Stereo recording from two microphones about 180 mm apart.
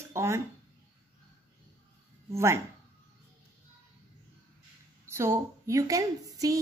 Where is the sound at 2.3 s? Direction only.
15° right (ahead or behind).